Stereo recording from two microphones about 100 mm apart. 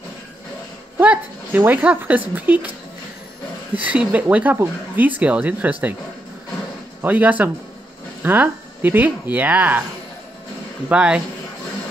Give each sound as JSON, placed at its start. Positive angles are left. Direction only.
{"t": 0.9, "sound": "a sound", "side_deg": -15}
{"t": 1.7, "sound": "speech", "side_deg": -15}
{"t": 3.7, "sound": "speech", "side_deg": -15}
{"t": 7.0, "sound": "speech", "side_deg": -15}
{"t": 10.9, "sound": "speech", "side_deg": -10}